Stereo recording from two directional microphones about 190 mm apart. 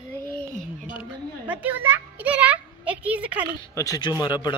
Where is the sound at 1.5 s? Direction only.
10° right (ahead or behind).